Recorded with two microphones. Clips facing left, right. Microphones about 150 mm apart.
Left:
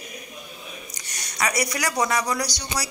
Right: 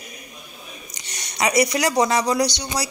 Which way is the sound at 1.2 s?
20° right (ahead or behind).